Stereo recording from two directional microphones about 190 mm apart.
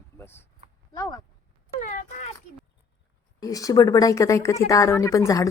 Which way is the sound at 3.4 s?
20° left (ahead or behind).